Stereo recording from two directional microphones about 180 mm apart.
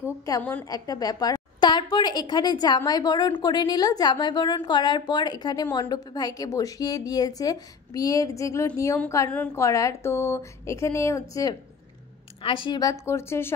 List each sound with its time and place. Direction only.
0.2 s a woman's voice: 15° left (ahead or behind)
0.7 s a woman's voice: 20° left (ahead or behind)